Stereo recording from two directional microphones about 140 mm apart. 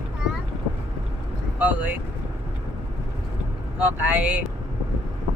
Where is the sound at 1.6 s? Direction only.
10° right (ahead or behind).